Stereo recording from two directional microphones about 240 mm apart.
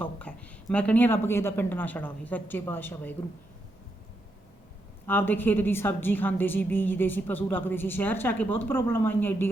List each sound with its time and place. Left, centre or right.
0.0 s a woman's voice: centre
5.0 s a woman's voice: centre